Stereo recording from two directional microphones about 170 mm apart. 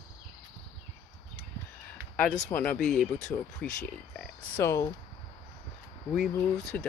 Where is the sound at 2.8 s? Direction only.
5° left (ahead or behind).